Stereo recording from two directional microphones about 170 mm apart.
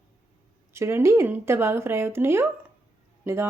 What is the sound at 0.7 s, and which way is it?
A woman's voice, 15° right (ahead or behind).